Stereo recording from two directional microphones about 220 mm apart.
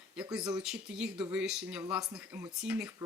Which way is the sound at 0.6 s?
5° right (ahead or behind).